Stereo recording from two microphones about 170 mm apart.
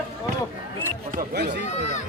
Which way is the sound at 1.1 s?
70° right (ahead or behind).